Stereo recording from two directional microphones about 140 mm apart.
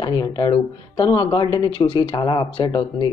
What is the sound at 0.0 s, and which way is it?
A woman's voice, 30° left (ahead or behind).